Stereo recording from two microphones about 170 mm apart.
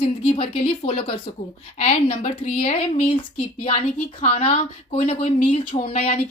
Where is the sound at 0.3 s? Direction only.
35° left (ahead or behind).